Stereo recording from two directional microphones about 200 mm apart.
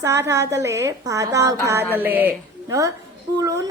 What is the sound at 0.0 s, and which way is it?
A woman's voice, 15° right (ahead or behind).